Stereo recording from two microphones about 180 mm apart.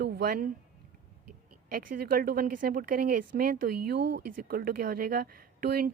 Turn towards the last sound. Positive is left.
turn(degrees=-60)  # may be behind; listen again after turning